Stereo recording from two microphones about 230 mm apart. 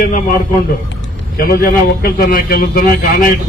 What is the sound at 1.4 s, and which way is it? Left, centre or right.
A man's voice, left.